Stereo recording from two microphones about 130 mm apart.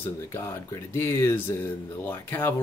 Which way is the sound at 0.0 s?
20° left (ahead or behind).